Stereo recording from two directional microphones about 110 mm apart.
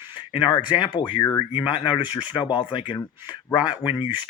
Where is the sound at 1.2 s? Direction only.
30° left (ahead or behind).